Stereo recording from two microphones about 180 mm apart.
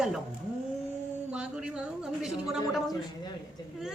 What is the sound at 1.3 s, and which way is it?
Speech, 5° right (ahead or behind).